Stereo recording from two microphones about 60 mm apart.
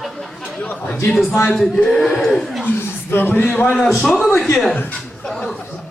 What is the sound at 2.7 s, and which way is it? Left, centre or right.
Speech, left.